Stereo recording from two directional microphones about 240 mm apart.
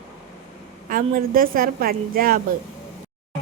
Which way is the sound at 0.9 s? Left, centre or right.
Right.